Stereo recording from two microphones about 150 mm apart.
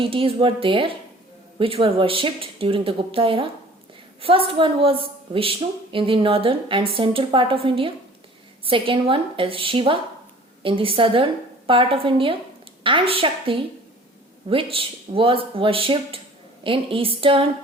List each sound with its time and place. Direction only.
0.0 s a woman's voice: 35° right (ahead or behind)